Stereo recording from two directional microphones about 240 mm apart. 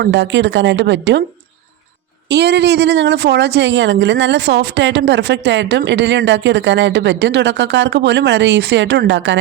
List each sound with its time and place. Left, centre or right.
0.0 s a woman's voice: right
2.3 s a woman's voice: right